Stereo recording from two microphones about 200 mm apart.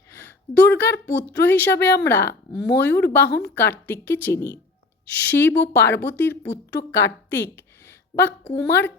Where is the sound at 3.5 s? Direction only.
10° left (ahead or behind).